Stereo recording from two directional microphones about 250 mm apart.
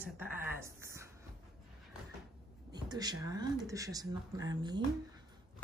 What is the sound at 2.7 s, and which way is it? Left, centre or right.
A woman's voice, centre.